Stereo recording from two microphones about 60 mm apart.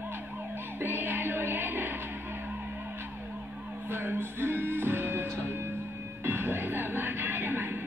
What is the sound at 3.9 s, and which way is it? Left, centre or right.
Music, right.